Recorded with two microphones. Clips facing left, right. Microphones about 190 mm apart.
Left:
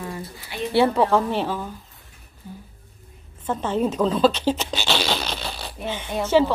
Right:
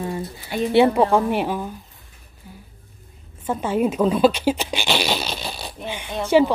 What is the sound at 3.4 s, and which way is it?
Speech, 10° right (ahead or behind).